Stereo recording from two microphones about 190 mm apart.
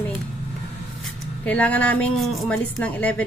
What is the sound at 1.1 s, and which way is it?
Speech, 5° left (ahead or behind).